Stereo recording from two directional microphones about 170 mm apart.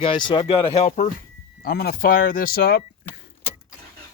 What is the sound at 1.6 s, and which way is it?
Speech, 65° left (ahead or behind).